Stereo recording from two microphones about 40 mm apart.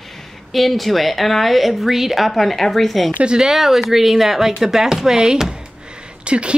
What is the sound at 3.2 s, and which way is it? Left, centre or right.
Speech, right.